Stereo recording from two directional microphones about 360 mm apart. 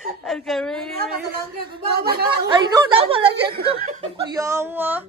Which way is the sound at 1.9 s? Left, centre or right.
Right.